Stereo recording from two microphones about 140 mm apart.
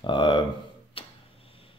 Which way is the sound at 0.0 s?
30° left (ahead or behind).